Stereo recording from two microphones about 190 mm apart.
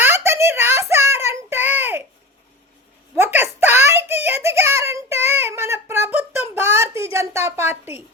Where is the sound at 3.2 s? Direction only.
10° right (ahead or behind).